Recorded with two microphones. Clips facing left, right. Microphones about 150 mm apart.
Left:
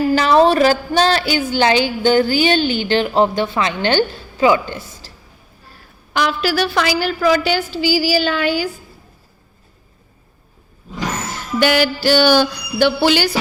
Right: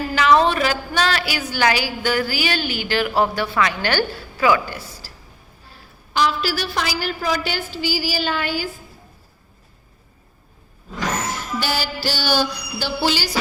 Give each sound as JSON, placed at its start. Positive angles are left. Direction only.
{"t": 0.1, "sound": "a woman's voice", "side_deg": 35}
{"t": 6.1, "sound": "a woman's voice", "side_deg": 60}
{"t": 11.6, "sound": "music", "side_deg": 65}